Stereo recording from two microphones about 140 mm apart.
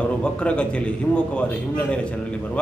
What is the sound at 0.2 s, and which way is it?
A man's voice, 10° left (ahead or behind).